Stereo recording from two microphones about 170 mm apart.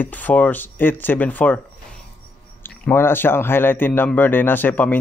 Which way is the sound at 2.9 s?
10° left (ahead or behind).